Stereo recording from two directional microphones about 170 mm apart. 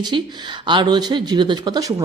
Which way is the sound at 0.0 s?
25° right (ahead or behind).